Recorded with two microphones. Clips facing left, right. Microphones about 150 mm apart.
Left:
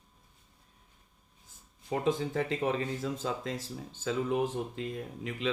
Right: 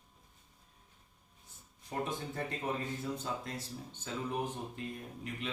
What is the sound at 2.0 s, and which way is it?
Speech, 90° left.